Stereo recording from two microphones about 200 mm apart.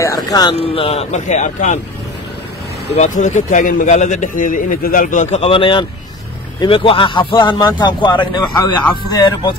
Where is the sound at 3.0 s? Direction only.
40° left (ahead or behind).